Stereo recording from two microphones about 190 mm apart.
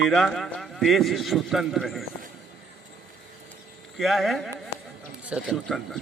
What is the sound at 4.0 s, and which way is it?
A man's voice, centre (ahead or behind).